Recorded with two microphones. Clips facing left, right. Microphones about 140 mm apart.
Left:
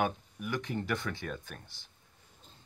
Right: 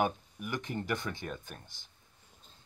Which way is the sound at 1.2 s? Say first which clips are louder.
Left 1 dB; 15° right (ahead or behind).